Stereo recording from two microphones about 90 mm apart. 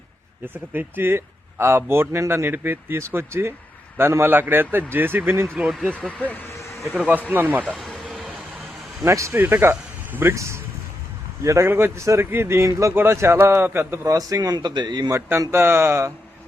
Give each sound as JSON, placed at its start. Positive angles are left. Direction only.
{"t": 0.4, "sound": "speech", "side_deg": -20}
{"t": 6.1, "sound": "speech", "side_deg": 15}
{"t": 6.5, "sound": "a sound", "side_deg": 35}
{"t": 6.8, "sound": "speech", "side_deg": -5}
{"t": 7.3, "sound": "speech", "side_deg": -20}
{"t": 7.6, "sound": "a sound", "side_deg": 5}
{"t": 9.0, "sound": "speech", "side_deg": -30}
{"t": 15.3, "sound": "speech", "side_deg": -30}